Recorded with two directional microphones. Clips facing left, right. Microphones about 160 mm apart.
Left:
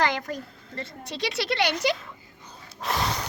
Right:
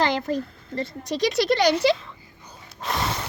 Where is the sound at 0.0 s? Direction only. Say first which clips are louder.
Right 3 dB; 30° right (ahead or behind).